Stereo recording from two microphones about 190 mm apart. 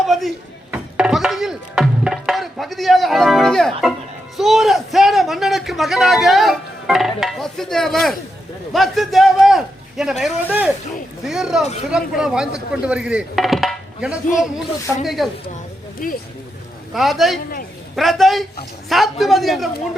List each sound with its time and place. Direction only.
0.0 s music: centre (ahead or behind)
4.4 s a man's voice: centre (ahead or behind)
16.0 s speech: 45° left (ahead or behind)
16.9 s a man's voice: centre (ahead or behind)